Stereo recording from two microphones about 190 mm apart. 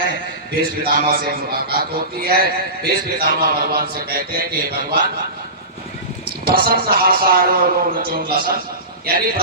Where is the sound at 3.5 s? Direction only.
55° right (ahead or behind).